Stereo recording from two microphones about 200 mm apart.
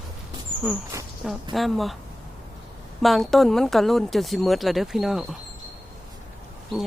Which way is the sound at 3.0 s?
Centre (ahead or behind).